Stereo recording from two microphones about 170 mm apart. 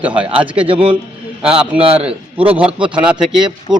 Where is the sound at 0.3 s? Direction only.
30° right (ahead or behind).